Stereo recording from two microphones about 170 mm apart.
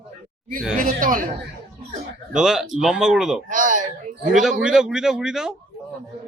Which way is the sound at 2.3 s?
5° right (ahead or behind).